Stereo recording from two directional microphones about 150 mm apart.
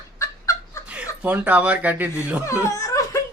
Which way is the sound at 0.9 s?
10° right (ahead or behind).